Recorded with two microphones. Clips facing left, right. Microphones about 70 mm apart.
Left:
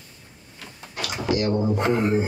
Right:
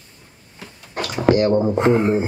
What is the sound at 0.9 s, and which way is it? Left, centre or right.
Speech, right.